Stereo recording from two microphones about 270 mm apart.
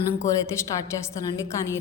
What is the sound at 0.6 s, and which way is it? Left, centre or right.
Speech, centre.